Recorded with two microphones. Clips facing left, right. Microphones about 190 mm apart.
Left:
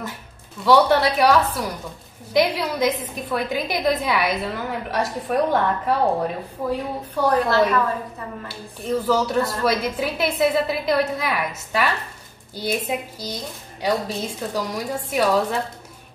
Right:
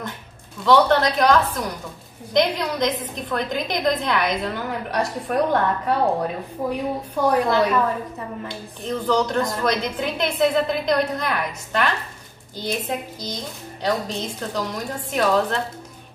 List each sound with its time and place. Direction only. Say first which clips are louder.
0.7 s a woman's voice: even; 10° left (ahead or behind)
7.2 s a woman's voice: even; 15° right (ahead or behind)
8.5 s a woman's voice: left 5 dB; 5° left (ahead or behind)